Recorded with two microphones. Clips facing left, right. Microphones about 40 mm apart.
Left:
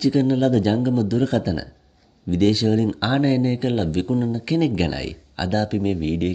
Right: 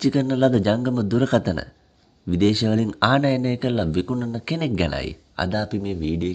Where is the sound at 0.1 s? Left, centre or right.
Right.